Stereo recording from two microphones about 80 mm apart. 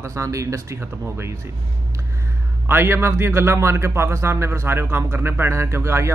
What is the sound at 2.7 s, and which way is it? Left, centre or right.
A man's voice, right.